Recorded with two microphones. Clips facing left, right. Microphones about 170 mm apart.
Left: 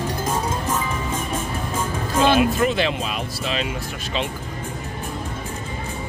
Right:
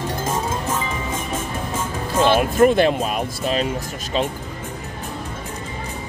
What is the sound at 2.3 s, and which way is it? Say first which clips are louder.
Speech: right 4 dB; 50° right (ahead or behind).